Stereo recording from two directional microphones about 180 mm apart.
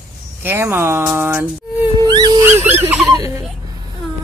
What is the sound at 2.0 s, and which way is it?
Dog, 25° right (ahead or behind).